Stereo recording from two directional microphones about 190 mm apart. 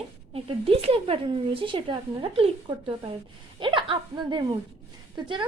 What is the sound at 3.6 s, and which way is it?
Speech, 25° right (ahead or behind).